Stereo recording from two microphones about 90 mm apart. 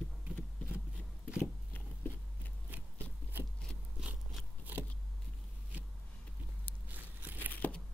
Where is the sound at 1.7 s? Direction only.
20° left (ahead or behind).